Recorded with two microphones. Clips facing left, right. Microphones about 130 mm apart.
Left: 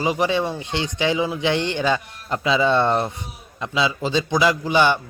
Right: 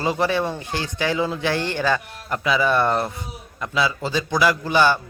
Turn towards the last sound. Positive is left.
turn(degrees=20)  # may be behind; listen again after turning